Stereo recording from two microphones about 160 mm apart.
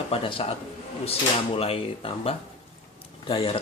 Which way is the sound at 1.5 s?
35° left (ahead or behind).